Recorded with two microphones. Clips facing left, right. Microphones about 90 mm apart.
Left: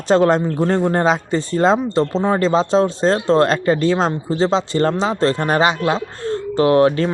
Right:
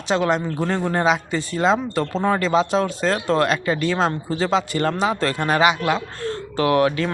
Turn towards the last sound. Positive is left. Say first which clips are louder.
# left 5 dB
turn(degrees=30)  # may be behind; listen again after turning